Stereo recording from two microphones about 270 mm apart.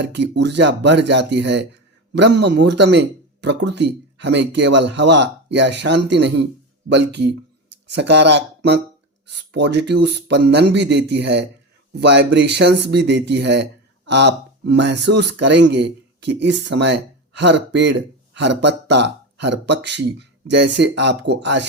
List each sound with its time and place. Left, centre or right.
0.0 s speech: right